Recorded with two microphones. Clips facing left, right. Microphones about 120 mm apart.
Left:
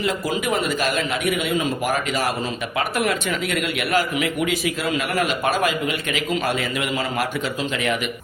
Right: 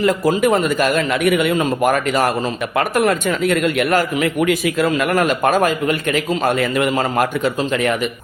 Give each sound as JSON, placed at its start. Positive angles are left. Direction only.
{"t": 0.0, "sound": "a man's voice", "side_deg": -50}